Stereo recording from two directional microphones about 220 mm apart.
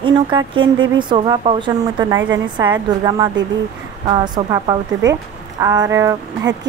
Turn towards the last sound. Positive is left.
turn(degrees=-15)  # may be behind; listen again after turning